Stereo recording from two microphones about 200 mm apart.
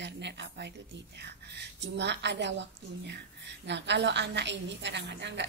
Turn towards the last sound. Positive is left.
turn(degrees=-60)  # may be behind; listen again after turning